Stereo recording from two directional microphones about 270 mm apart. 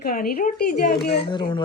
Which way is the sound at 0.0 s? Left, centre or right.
Left.